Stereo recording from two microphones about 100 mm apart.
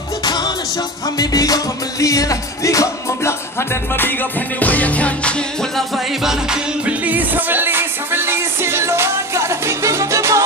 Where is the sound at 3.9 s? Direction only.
20° left (ahead or behind).